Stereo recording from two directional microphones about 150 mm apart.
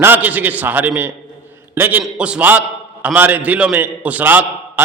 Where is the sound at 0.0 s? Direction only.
10° right (ahead or behind).